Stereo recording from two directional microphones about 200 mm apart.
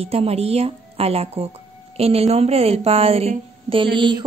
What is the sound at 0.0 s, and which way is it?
A woman's voice, 30° right (ahead or behind).